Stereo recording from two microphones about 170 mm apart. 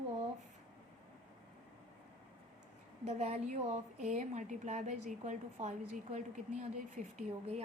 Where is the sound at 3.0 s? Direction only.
40° right (ahead or behind).